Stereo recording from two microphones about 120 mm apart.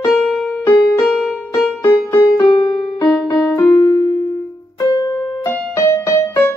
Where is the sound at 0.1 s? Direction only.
Centre (ahead or behind).